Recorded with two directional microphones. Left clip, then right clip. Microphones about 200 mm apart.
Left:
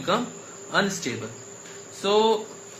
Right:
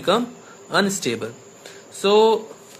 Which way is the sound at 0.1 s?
50° right (ahead or behind).